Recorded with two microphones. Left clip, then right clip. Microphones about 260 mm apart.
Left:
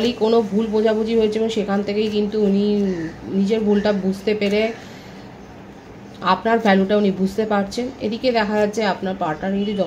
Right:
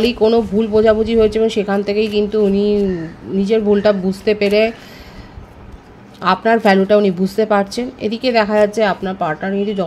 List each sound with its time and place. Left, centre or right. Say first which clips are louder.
0.0 s speech: right 4 dB; right
6.2 s speech: right 4 dB; right